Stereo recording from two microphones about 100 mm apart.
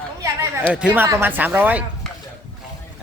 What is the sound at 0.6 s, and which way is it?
A man's voice, 15° right (ahead or behind).